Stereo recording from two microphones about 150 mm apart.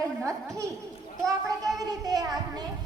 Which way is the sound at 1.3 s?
25° right (ahead or behind).